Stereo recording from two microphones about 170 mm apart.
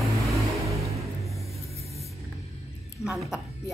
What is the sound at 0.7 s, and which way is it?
Music, centre (ahead or behind).